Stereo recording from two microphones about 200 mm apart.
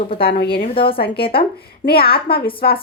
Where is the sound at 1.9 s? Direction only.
50° left (ahead or behind).